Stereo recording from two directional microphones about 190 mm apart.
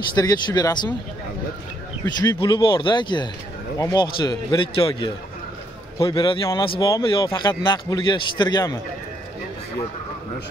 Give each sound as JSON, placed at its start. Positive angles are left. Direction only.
{"t": 0.1, "sound": "a man's voice", "side_deg": 20}
{"t": 2.2, "sound": "a man's voice", "side_deg": 25}